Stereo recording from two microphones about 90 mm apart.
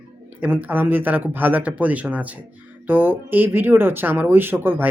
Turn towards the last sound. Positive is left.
turn(degrees=-20)  # may be behind; listen again after turning